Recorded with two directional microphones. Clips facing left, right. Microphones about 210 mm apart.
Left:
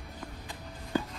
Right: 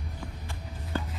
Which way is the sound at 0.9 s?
15° left (ahead or behind).